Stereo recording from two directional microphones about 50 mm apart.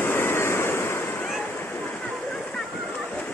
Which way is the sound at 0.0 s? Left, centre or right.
Left.